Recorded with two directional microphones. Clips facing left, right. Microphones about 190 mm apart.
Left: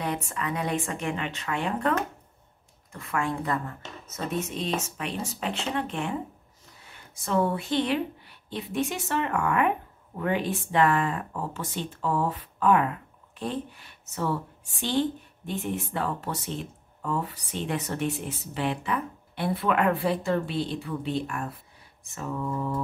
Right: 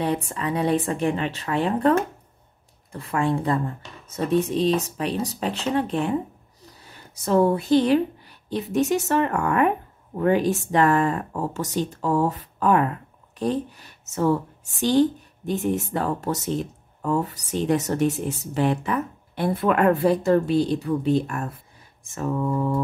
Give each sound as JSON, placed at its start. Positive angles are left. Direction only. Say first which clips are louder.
{"t": 0.0, "sound": "a woman's voice", "louder": "right 6 dB", "side_deg": -30}